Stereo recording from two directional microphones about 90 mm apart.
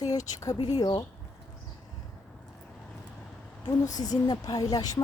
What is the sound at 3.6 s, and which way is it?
Speech, 45° left (ahead or behind).